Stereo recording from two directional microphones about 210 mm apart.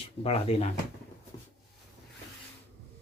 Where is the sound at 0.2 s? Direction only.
30° left (ahead or behind).